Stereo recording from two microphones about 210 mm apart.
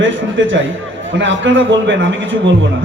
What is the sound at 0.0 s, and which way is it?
A man's voice, 65° right (ahead or behind).